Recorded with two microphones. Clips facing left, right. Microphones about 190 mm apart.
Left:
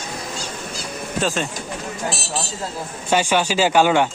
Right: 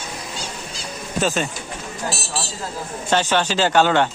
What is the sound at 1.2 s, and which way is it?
Speech, centre (ahead or behind).